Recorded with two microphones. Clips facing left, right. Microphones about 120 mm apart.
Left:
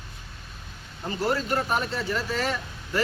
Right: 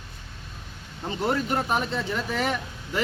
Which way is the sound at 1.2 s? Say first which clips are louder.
Even; 20° right (ahead or behind).